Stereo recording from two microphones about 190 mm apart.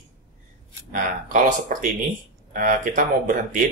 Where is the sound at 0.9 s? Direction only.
45° right (ahead or behind).